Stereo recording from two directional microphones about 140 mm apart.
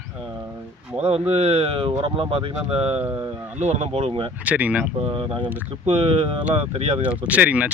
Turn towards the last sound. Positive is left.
turn(degrees=-10)  # may be behind; listen again after turning